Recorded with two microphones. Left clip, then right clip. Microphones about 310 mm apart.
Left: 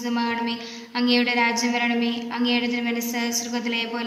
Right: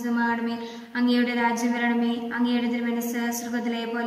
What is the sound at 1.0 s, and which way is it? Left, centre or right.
A woman's voice, centre.